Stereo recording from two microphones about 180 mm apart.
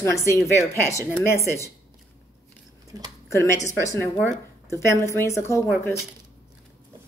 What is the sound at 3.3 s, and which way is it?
Speech, 15° left (ahead or behind).